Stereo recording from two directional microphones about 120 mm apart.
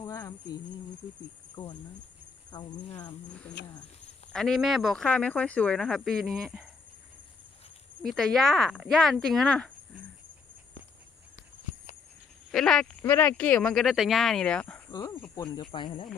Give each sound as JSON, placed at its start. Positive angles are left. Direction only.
{"t": 0.0, "sound": "cricket", "side_deg": 30}
{"t": 2.5, "sound": "speech", "side_deg": 35}
{"t": 4.3, "sound": "speech", "side_deg": 5}
{"t": 5.0, "sound": "speech", "side_deg": 10}
{"t": 8.0, "sound": "speech", "side_deg": 0}
{"t": 12.5, "sound": "speech", "side_deg": 5}
{"t": 15.7, "sound": "speech", "side_deg": 45}